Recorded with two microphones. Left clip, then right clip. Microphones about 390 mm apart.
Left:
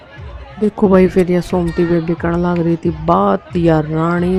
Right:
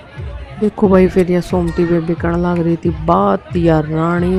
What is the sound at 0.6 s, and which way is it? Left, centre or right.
Speech, centre.